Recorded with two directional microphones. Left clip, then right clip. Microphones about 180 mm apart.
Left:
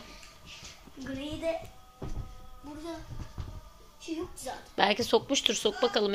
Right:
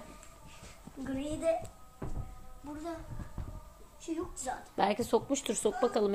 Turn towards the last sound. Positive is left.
turn(degrees=-5)  # may be behind; listen again after turning